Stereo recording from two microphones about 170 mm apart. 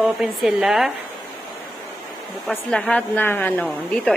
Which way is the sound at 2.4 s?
5° left (ahead or behind).